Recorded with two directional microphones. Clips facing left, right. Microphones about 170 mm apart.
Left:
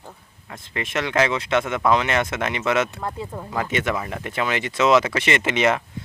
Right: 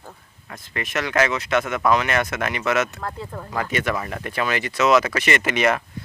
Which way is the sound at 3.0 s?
15° left (ahead or behind).